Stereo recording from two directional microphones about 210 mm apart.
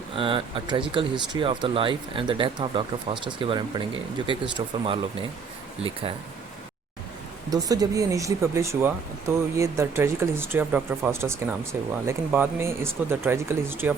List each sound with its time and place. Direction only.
0.2 s speech: 25° right (ahead or behind)
7.5 s speech: 15° right (ahead or behind)